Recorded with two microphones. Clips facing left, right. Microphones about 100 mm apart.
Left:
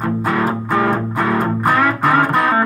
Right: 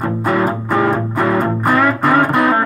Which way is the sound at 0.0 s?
5° right (ahead or behind).